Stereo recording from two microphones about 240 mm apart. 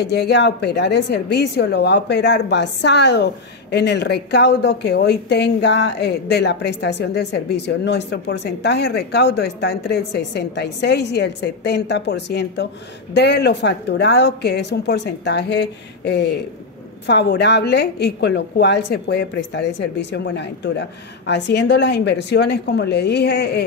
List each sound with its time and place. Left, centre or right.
0.0 s speech: left